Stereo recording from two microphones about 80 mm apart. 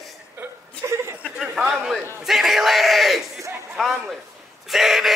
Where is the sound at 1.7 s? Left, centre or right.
Centre.